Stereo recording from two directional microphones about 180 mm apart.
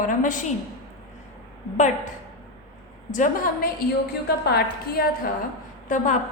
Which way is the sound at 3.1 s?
45° left (ahead or behind).